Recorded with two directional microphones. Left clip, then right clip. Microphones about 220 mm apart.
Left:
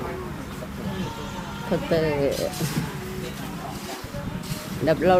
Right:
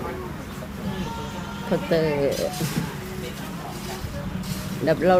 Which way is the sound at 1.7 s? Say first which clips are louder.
Right 1 dB; 5° right (ahead or behind).